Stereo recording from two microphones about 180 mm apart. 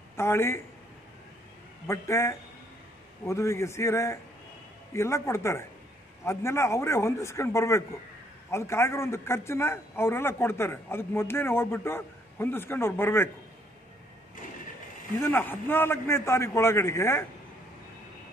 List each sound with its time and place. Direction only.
0.1 s speech: 15° left (ahead or behind)
1.9 s a man's voice: 15° left (ahead or behind)
15.2 s a man's voice: 10° left (ahead or behind)